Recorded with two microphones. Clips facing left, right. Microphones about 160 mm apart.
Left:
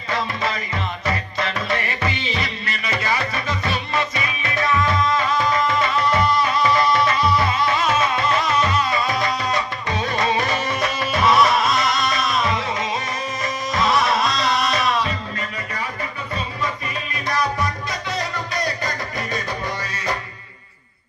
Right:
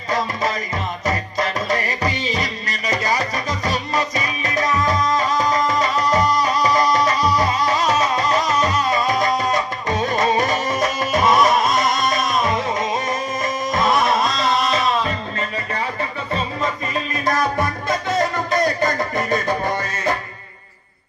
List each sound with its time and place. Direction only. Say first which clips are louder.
0.1 s music: right 3 dB; 40° right (ahead or behind)
14.4 s music: right 2 dB; 30° right (ahead or behind)
16.6 s music: right 4 dB; 45° right (ahead or behind)